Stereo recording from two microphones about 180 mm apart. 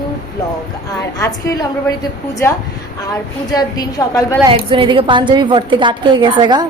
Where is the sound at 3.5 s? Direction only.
20° left (ahead or behind).